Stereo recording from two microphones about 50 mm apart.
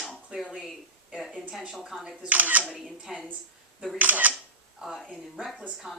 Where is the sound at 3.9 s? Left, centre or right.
Right.